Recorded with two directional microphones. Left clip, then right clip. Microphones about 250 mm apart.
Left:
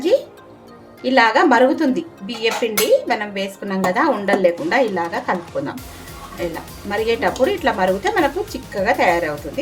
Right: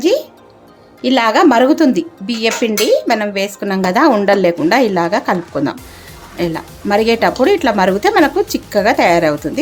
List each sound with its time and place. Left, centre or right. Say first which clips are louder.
1.0 s a woman's voice: right 3 dB; right